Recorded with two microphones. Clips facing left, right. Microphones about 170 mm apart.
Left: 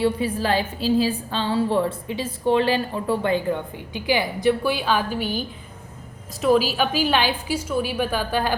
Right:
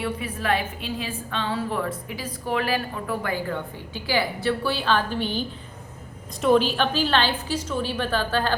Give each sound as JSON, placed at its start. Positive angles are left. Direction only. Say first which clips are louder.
{"t": 0.0, "sound": "a woman's voice", "louder": "left 6 dB", "side_deg": 30}